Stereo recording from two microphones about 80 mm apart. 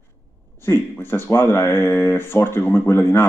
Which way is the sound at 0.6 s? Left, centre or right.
Left.